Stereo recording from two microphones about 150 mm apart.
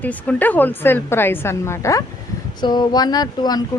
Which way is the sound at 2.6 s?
30° left (ahead or behind).